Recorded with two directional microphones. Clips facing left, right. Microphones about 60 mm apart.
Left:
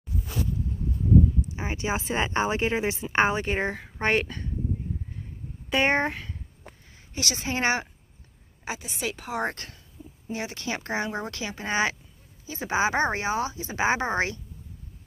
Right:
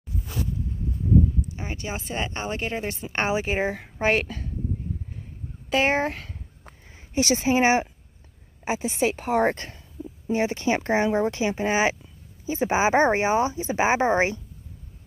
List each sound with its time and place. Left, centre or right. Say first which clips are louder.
1.4 s speech: left 2 dB; left
3.3 s a woman's voice: right 2 dB; centre
5.7 s a woman's voice: right 1 dB; centre
7.4 s speech: right 5 dB; centre
8.6 s a woman's voice: right 8 dB; right